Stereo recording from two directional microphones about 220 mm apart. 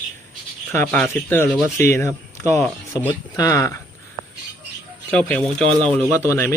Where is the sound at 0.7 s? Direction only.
10° left (ahead or behind).